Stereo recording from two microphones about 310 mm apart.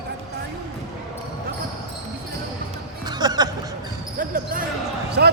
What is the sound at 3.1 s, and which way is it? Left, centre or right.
Music, centre.